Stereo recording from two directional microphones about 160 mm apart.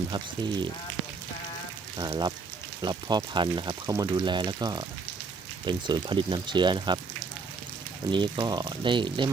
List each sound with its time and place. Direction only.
0.1 s speech: 30° right (ahead or behind)
2.0 s speech: 25° right (ahead or behind)
8.1 s speech: 30° right (ahead or behind)